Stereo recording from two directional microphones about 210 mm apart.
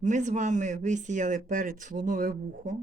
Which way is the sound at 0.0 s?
35° right (ahead or behind).